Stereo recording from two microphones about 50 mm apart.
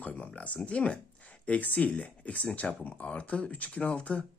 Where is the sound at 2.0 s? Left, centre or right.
Left.